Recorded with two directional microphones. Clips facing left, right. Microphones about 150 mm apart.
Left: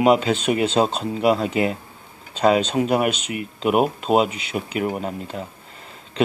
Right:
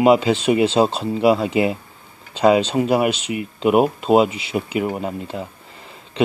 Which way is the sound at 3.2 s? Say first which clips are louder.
Right 3 dB; 50° left (ahead or behind).